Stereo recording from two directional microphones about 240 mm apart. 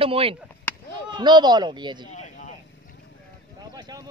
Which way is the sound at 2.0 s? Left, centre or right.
Left.